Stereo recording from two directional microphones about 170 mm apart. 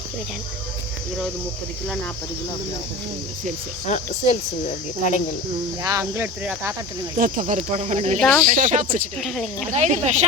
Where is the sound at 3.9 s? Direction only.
40° left (ahead or behind).